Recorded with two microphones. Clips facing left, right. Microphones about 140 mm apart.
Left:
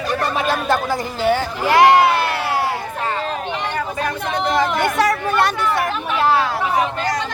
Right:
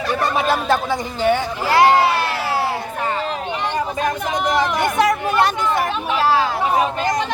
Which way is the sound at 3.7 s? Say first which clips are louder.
Right 2 dB; 20° right (ahead or behind).